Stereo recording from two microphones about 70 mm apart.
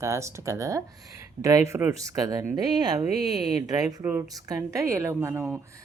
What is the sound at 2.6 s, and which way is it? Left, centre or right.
Speech, right.